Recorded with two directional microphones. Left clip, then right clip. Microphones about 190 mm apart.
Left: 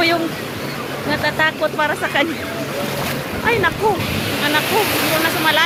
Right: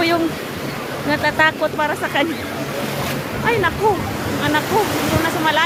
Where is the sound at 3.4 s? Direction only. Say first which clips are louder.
Left 1 dB; 10° right (ahead or behind).